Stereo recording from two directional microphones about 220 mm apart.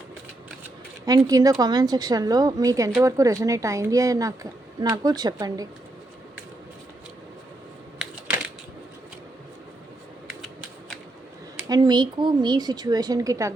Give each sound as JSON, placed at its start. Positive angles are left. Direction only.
{"t": 1.0, "sound": "a woman's voice", "side_deg": -15}
{"t": 11.7, "sound": "a woman's voice", "side_deg": -20}